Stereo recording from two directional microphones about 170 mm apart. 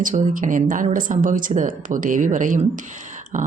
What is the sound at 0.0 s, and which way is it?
Speech, 50° right (ahead or behind).